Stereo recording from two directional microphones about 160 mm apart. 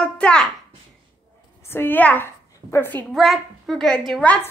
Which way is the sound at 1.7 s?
15° left (ahead or behind).